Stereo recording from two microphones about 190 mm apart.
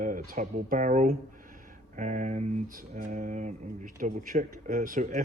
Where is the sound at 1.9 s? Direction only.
40° right (ahead or behind).